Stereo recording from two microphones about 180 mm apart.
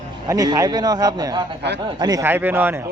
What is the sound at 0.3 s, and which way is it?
A man's voice, 20° right (ahead or behind).